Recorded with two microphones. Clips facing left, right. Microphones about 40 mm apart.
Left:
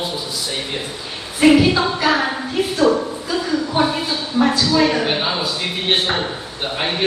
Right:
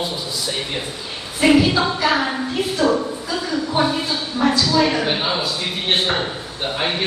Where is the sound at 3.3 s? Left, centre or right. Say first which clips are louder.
Left 2 dB; centre.